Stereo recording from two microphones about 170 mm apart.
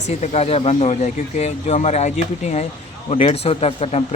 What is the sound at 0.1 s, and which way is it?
Speech, 40° left (ahead or behind).